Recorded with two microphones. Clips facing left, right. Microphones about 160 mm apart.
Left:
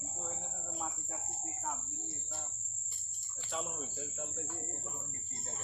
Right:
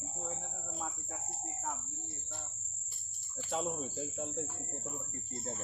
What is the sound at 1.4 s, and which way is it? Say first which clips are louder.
Speech: even; 5° left (ahead or behind).